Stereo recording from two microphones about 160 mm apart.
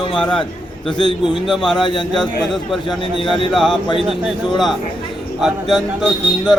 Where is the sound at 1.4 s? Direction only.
Centre (ahead or behind).